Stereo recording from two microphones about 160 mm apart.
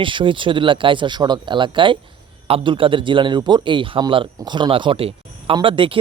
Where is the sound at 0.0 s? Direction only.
30° right (ahead or behind).